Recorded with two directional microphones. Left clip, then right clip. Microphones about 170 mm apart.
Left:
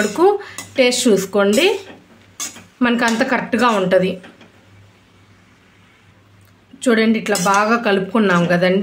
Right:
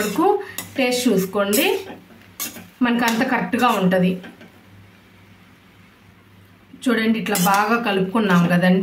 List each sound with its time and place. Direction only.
0.2 s speech: 45° left (ahead or behind)
2.8 s speech: 45° left (ahead or behind)
6.8 s a woman's voice: 50° left (ahead or behind)